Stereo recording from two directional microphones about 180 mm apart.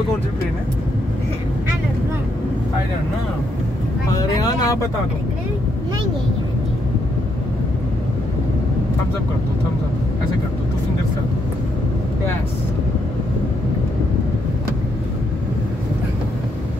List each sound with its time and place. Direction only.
4.1 s speech: 20° left (ahead or behind)